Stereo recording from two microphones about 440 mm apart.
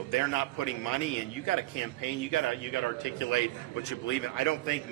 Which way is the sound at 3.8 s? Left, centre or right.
Left.